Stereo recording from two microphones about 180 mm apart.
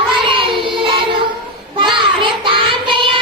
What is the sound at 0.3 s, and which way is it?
Child singing, 30° right (ahead or behind).